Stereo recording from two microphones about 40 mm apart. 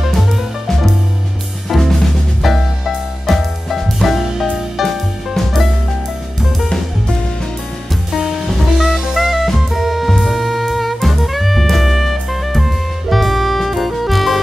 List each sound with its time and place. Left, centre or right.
1.7 s drum kit: centre
3.3 s music: centre
8.1 s music: centre